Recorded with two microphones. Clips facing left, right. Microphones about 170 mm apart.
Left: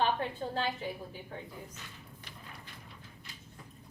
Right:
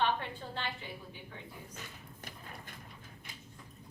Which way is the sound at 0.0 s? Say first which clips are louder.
Left 2 dB; 35° left (ahead or behind).